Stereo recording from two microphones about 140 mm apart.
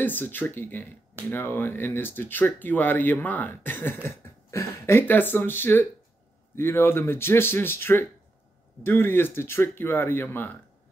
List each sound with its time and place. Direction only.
0.0 s speech: 15° left (ahead or behind)